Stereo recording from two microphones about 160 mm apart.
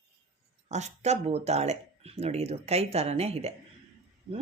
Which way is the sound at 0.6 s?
45° right (ahead or behind).